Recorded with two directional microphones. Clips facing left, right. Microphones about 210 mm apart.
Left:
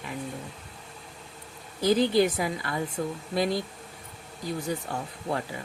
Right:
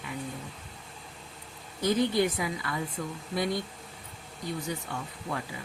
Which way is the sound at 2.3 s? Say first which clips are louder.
Left 3 dB; 35° left (ahead or behind).